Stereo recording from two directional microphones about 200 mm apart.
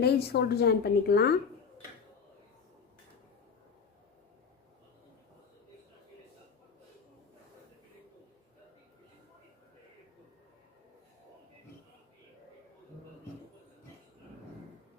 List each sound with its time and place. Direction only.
0.0 s a woman's voice: 55° left (ahead or behind)